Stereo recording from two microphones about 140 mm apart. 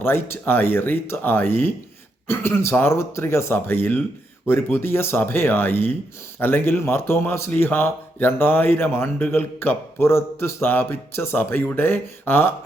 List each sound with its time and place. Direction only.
0.0 s speech: 15° left (ahead or behind)